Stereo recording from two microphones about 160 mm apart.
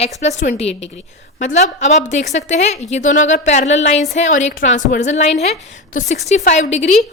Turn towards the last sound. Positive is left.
turn(degrees=45)  # may be behind; listen again after turning